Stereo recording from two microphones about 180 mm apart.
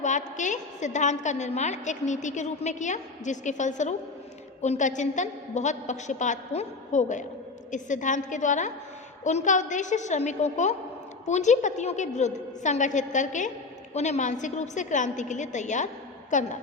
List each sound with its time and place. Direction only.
0.0 s a woman's voice: 45° left (ahead or behind)